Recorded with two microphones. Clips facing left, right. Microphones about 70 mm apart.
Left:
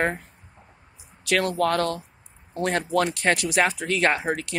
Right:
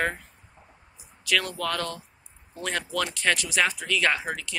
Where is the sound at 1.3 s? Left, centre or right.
Left.